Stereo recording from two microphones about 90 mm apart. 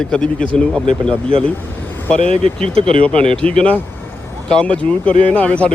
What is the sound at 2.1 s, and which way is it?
Speech, 90° right.